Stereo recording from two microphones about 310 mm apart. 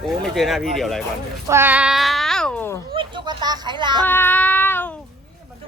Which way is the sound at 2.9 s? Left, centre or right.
Centre.